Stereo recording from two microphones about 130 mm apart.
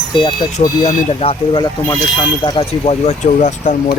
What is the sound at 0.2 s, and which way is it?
Speech, 35° left (ahead or behind).